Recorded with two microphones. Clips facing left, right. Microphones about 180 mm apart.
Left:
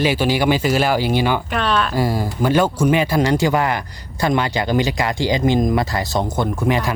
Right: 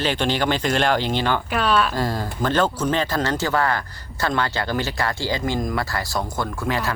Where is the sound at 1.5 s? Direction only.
5° right (ahead or behind).